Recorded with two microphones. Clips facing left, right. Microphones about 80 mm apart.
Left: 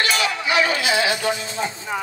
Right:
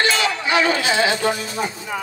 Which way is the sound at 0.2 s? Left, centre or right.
Right.